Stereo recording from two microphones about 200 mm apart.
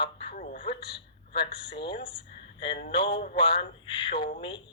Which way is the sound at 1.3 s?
25° left (ahead or behind).